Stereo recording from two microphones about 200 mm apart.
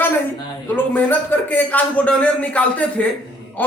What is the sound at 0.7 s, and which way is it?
A man's voice, 10° left (ahead or behind).